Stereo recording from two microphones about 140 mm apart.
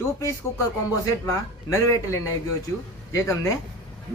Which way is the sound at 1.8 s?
25° left (ahead or behind).